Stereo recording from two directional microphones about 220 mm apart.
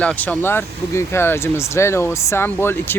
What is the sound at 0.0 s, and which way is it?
Speech, 5° left (ahead or behind).